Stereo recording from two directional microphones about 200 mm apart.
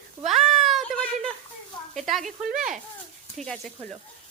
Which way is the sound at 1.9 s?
Centre (ahead or behind).